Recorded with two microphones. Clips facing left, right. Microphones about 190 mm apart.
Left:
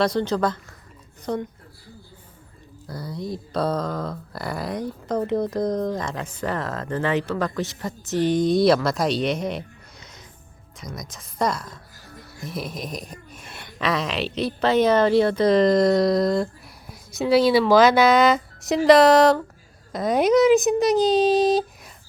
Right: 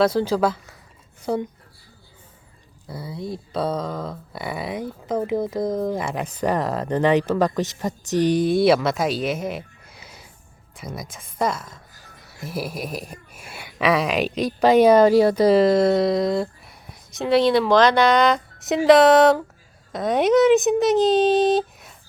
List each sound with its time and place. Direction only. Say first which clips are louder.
0.0 s speech: right 3 dB; 5° right (ahead or behind)
2.8 s speech: even; 5° right (ahead or behind)